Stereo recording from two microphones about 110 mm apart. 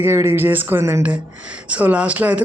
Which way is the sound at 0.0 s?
25° right (ahead or behind).